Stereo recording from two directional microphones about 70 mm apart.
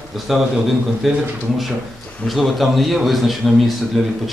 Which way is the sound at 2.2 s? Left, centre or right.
Centre.